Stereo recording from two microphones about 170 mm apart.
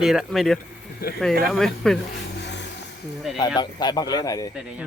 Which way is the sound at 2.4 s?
90° left.